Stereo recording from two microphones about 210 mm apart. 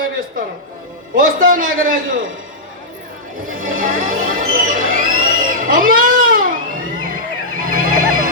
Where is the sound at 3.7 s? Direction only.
40° right (ahead or behind).